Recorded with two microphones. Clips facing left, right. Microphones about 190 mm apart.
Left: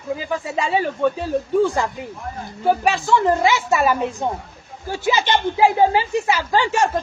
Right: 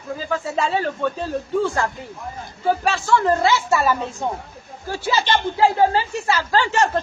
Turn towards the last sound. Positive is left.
turn(degrees=15)  # may be behind; listen again after turning